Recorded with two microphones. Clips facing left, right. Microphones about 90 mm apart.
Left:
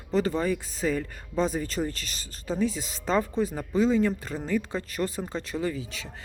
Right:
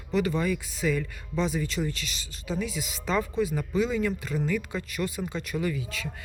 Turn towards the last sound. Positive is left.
turn(degrees=25)  # may be behind; listen again after turning